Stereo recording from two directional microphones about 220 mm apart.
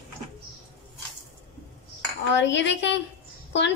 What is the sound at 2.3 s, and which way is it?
Speech, 55° left (ahead or behind).